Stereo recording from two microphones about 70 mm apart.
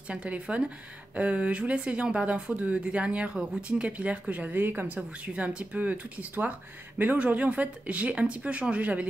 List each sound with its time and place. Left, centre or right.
0.1 s speech: centre